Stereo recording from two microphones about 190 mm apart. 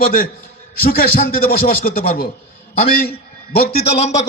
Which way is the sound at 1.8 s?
50° left (ahead or behind).